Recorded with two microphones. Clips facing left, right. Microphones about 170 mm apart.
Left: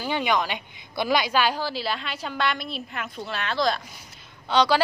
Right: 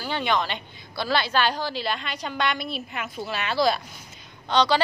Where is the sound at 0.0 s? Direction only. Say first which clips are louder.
Left 1 dB; 10° left (ahead or behind); by 3.8 s 5° right (ahead or behind).